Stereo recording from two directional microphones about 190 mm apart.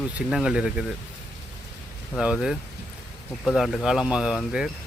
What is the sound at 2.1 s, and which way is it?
Speech, 5° right (ahead or behind).